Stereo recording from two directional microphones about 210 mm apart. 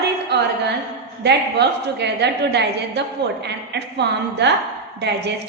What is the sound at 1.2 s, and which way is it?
A woman's voice, 55° right (ahead or behind).